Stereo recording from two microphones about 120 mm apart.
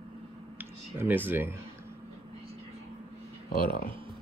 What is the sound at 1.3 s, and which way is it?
Speech, 15° right (ahead or behind).